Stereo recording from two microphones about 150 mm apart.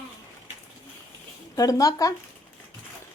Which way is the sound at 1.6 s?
25° left (ahead or behind).